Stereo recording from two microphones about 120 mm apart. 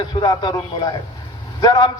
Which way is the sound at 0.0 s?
35° left (ahead or behind).